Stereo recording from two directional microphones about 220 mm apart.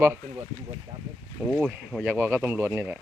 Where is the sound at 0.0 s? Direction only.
10° right (ahead or behind).